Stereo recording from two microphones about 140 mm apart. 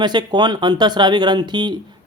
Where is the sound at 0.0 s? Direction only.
30° right (ahead or behind).